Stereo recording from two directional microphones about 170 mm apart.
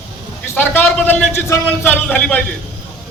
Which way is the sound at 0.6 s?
10° left (ahead or behind).